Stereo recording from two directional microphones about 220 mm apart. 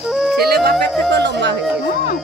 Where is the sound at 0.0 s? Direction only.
Centre (ahead or behind).